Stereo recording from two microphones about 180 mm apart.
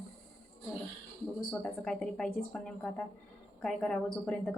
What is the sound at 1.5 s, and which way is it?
Speech, 5° left (ahead or behind).